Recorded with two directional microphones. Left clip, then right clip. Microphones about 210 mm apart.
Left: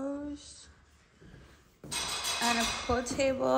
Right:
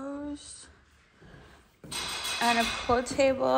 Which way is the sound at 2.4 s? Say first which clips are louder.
Right 5 dB; 5° left (ahead or behind).